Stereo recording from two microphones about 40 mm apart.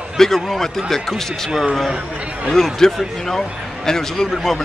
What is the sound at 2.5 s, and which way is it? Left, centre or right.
A man's voice, centre.